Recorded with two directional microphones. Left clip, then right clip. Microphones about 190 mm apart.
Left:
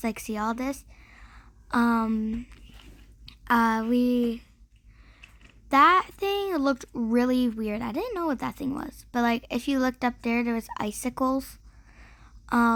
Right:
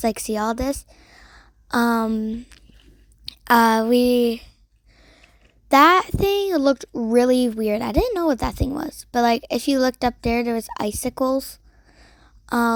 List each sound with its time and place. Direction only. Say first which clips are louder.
0.0 s a woman's voice: right 7 dB; 30° right (ahead or behind)
2.0 s speech: right 5 dB; 25° right (ahead or behind)
3.2 s speech: right 8 dB; 40° right (ahead or behind)
5.6 s speech: right 5 dB; 35° right (ahead or behind)